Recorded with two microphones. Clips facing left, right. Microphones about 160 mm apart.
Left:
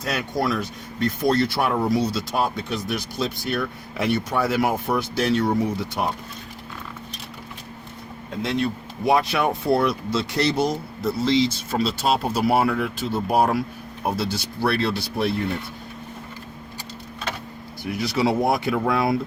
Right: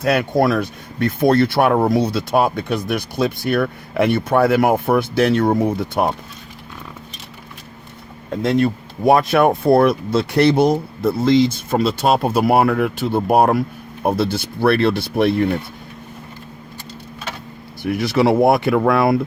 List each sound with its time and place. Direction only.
0.0 s speech: 55° right (ahead or behind)
8.4 s speech: 50° right (ahead or behind)
17.8 s speech: 60° right (ahead or behind)